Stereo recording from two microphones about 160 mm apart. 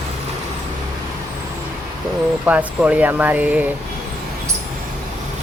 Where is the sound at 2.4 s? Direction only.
10° right (ahead or behind).